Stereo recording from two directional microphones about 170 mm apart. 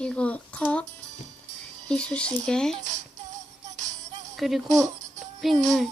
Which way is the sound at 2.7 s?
45° right (ahead or behind).